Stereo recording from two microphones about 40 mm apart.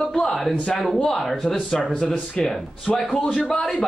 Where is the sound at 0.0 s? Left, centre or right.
Centre.